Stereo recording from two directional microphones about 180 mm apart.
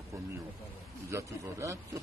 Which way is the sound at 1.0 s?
15° right (ahead or behind).